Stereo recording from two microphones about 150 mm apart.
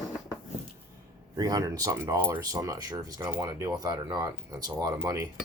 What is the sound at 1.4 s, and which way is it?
Speech, 25° right (ahead or behind).